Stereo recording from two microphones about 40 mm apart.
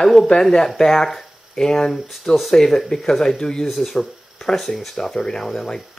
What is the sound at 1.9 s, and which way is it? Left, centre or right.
Speech, centre.